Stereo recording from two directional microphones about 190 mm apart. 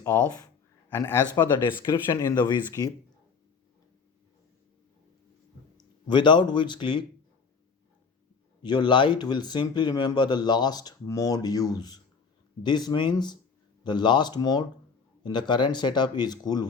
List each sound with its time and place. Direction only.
0.0 s a sound: 15° left (ahead or behind)
1.8 s speech: 20° left (ahead or behind)
5.7 s speech: 25° left (ahead or behind)
8.6 s speech: 25° left (ahead or behind)